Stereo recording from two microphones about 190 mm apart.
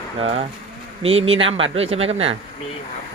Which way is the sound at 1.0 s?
30° right (ahead or behind).